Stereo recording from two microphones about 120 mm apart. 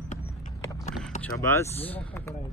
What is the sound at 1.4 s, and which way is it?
Speech, 20° left (ahead or behind).